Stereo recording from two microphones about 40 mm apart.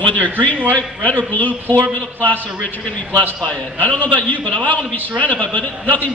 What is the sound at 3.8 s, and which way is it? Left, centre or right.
A man's voice, left.